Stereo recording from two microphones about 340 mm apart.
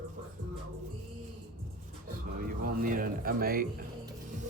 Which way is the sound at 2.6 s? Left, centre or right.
Right.